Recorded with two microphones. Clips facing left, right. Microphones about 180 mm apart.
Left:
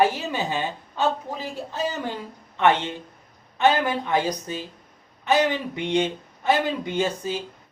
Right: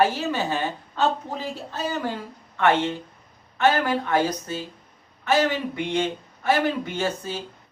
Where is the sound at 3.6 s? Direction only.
15° left (ahead or behind).